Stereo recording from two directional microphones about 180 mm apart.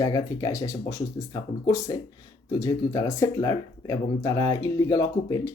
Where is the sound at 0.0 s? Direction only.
20° left (ahead or behind).